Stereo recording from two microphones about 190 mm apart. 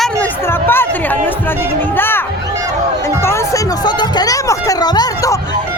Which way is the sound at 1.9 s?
10° left (ahead or behind).